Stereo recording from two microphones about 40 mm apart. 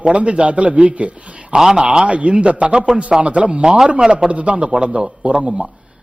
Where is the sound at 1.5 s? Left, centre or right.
Centre.